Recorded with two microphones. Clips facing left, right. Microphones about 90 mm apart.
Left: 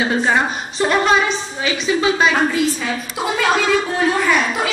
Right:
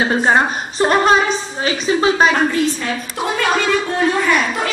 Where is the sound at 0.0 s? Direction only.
35° right (ahead or behind).